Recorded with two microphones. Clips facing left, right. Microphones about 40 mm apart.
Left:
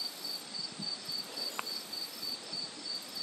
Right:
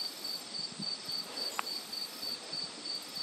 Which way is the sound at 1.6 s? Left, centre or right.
Right.